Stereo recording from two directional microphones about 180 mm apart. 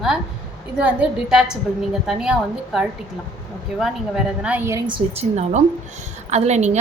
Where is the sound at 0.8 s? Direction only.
5° right (ahead or behind).